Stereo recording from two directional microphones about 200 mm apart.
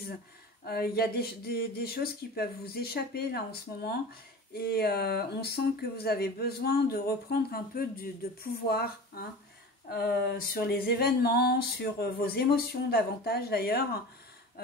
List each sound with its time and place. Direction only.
0.7 s speech: 50° left (ahead or behind)